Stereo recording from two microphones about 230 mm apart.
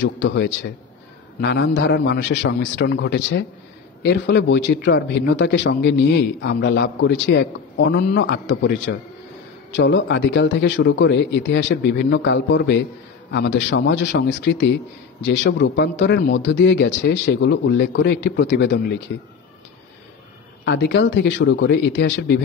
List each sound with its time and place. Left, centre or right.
0.0 s a man's voice: left
20.6 s a man's voice: left